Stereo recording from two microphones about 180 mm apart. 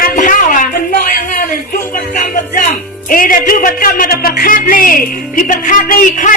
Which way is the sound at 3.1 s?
50° left (ahead or behind).